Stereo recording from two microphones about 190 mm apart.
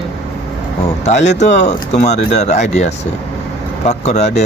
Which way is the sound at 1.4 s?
35° left (ahead or behind).